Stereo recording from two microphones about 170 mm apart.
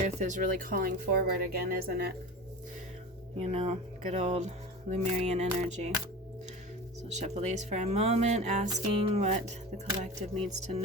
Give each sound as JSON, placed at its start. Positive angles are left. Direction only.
{"t": 0.0, "sound": "speech", "side_deg": -45}
{"t": 3.3, "sound": "speech", "side_deg": -35}
{"t": 7.1, "sound": "speech", "side_deg": -40}